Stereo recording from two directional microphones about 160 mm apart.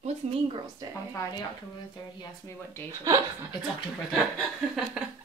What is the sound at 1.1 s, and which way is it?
Speech, 20° left (ahead or behind).